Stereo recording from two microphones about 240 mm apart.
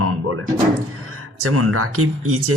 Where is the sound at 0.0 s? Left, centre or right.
Right.